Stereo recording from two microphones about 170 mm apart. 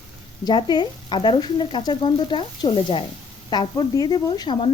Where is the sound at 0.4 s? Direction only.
25° left (ahead or behind).